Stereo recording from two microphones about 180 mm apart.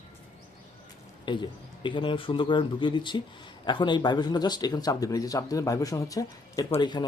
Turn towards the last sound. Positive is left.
turn(degrees=25)  # may be behind; listen again after turning